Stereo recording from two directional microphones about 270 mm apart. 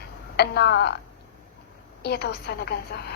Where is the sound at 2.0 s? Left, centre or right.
Left.